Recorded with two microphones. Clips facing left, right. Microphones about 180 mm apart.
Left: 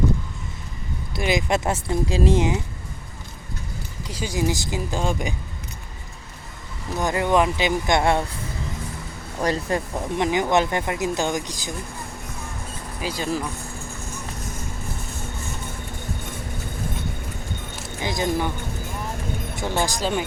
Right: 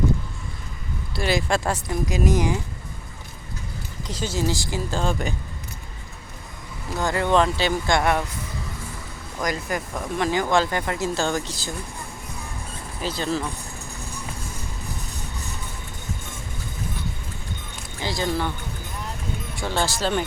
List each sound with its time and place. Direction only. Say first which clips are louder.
1.1 s speech: left 1 dB; 15° left (ahead or behind)
4.0 s speech: left 1 dB; 10° left (ahead or behind)
7.0 s speech: even; 20° left (ahead or behind)
9.4 s speech: left 3 dB; 30° left (ahead or behind); by 11.7 s 15° left (ahead or behind)
13.0 s speech: even; 10° left (ahead or behind)
18.0 s speech: left 1 dB; 20° left (ahead or behind)
19.5 s speech: left 1 dB; 15° left (ahead or behind)